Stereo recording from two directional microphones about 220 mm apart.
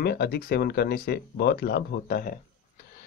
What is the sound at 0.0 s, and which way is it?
Speech, 45° left (ahead or behind).